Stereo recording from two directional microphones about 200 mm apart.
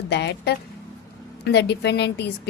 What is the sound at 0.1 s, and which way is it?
A woman's voice, 60° left (ahead or behind).